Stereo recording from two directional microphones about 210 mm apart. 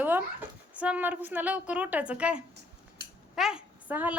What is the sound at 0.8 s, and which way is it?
A woman's voice, 5° right (ahead or behind).